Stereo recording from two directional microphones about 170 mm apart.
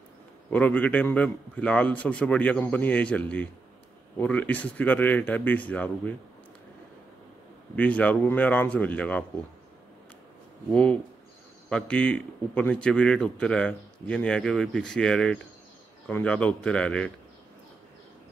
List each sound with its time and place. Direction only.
0.5 s a man's voice: 10° left (ahead or behind)
7.7 s a man's voice: 10° left (ahead or behind)
10.7 s a man's voice: 5° left (ahead or behind)